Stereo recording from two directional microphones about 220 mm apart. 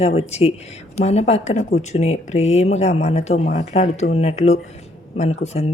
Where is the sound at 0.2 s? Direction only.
30° left (ahead or behind).